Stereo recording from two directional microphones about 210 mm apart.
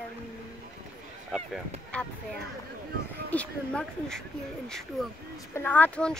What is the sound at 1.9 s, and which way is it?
Speech, 5° left (ahead or behind).